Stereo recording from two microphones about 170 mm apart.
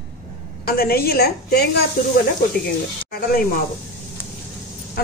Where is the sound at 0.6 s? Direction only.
60° left (ahead or behind).